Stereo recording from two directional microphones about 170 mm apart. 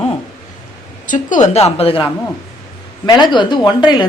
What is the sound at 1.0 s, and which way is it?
A woman's voice, 50° left (ahead or behind).